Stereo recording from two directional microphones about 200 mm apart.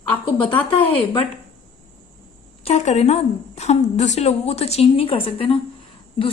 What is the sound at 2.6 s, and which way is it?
A woman's voice, 35° left (ahead or behind).